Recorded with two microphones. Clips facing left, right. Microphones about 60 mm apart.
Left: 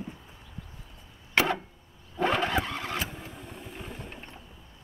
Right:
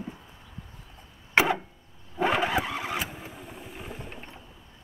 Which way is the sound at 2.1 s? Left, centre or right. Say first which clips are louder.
Right 1 dB; centre.